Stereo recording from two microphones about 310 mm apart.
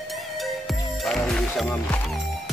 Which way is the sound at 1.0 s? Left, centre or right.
Centre.